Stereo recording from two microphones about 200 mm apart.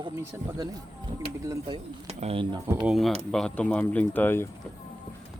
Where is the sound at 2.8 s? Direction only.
Centre (ahead or behind).